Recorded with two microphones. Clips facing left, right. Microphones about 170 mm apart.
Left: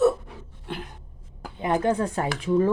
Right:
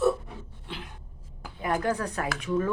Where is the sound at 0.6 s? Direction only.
50° left (ahead or behind).